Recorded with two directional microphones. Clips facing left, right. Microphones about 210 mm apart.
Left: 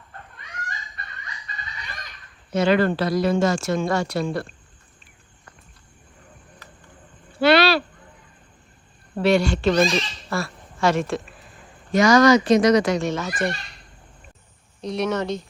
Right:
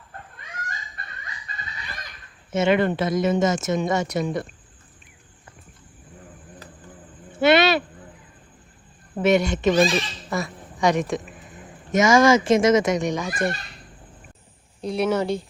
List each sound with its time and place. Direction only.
2.5 s speech: 25° right (ahead or behind)
7.3 s a sound: 20° right (ahead or behind)
9.1 s a man's voice: 20° right (ahead or behind)
9.7 s speech: 5° right (ahead or behind)
10.2 s a sound: 15° right (ahead or behind)
11.9 s speech: 20° right (ahead or behind)
14.8 s speech: 5° right (ahead or behind)